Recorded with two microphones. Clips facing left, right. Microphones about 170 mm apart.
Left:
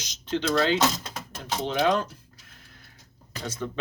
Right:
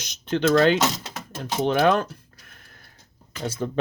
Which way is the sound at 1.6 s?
55° right (ahead or behind).